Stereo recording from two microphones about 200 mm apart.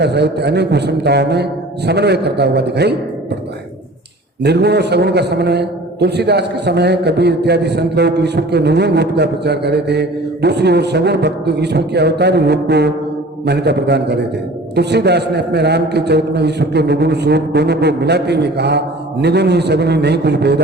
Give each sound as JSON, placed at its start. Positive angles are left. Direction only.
{"t": 0.0, "sound": "a man's voice", "side_deg": -55}
{"t": 4.4, "sound": "a man's voice", "side_deg": -55}